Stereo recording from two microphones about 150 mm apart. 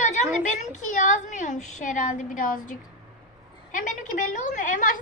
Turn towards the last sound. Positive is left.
turn(degrees=60)  # may be behind; listen again after turning